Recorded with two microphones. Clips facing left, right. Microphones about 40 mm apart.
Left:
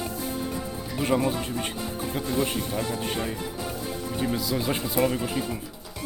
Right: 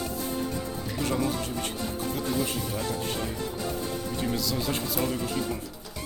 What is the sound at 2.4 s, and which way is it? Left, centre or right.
Speech, left.